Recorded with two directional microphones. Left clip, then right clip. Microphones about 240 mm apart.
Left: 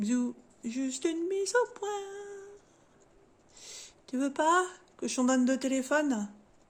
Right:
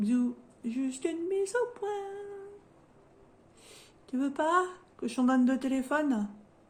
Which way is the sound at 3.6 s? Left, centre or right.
Left.